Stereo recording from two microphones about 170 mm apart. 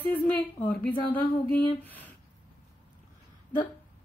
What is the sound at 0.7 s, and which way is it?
Speech, 10° left (ahead or behind).